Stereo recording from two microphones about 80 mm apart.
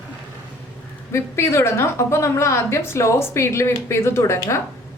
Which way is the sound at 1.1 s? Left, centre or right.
Left.